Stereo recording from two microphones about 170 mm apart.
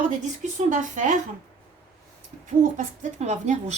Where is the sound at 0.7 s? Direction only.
50° right (ahead or behind).